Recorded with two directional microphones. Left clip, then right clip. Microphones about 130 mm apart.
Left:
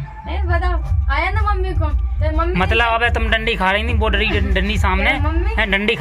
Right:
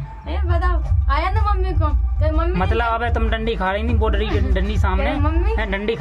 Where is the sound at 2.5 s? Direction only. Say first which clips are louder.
Left 6 dB; 15° right (ahead or behind).